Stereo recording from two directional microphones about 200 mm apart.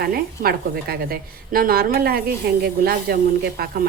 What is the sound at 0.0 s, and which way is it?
A woman's voice, 50° right (ahead or behind).